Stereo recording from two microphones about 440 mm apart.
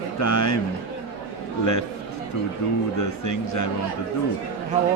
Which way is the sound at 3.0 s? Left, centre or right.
Left.